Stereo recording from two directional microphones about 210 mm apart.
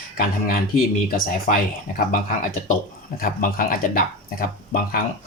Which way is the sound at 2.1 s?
40° left (ahead or behind).